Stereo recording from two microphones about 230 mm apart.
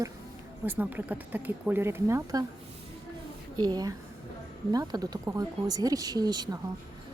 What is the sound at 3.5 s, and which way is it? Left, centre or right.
Speech, centre.